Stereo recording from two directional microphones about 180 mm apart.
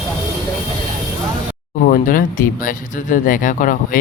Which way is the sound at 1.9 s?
50° left (ahead or behind).